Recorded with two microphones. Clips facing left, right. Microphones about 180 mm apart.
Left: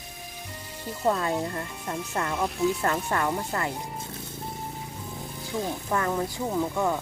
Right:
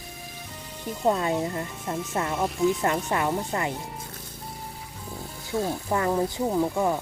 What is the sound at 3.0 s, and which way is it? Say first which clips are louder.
Speech: right 1 dB; 15° right (ahead or behind).